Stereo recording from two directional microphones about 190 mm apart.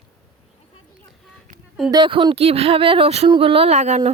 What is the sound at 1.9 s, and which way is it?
A woman's voice, 25° right (ahead or behind).